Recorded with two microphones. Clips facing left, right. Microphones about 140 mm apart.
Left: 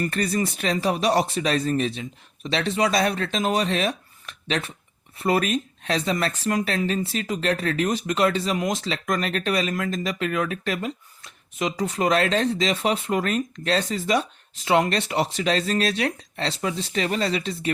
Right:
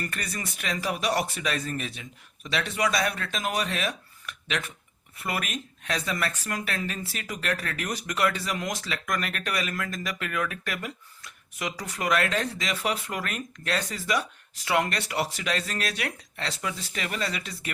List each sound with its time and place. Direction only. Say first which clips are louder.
0.0 s speech: left 10 dB; 30° left (ahead or behind)